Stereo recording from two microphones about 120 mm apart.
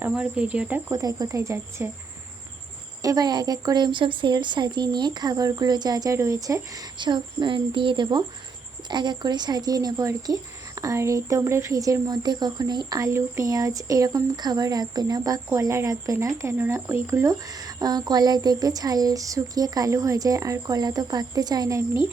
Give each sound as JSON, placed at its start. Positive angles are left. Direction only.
{"t": 0.1, "sound": "speech", "side_deg": -10}
{"t": 0.9, "sound": "speech", "side_deg": -30}
{"t": 3.0, "sound": "speech", "side_deg": -30}